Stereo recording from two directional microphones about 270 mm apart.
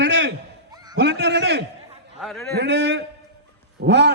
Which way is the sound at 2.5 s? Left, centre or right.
Right.